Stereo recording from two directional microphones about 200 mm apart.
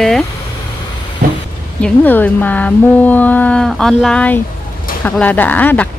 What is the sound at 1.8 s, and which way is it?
Speech, 10° left (ahead or behind).